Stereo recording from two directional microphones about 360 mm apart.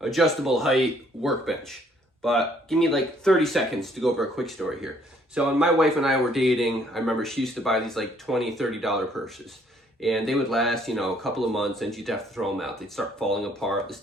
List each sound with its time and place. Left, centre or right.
0.0 s speech: centre